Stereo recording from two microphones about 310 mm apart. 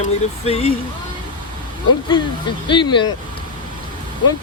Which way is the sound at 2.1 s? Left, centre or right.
Centre.